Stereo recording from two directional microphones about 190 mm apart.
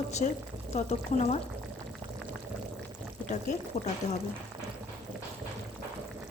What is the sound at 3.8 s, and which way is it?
Speech, 35° left (ahead or behind).